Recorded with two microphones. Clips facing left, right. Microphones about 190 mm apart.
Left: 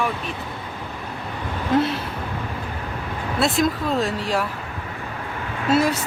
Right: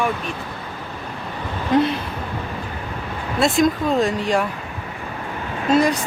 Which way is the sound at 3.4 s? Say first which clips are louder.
Right 4 dB; centre (ahead or behind).